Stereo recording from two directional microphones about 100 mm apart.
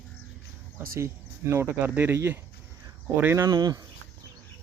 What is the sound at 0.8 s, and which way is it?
Speech, 25° right (ahead or behind).